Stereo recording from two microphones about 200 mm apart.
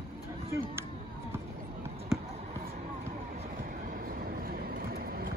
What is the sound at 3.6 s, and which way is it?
Vehicle, 45° right (ahead or behind).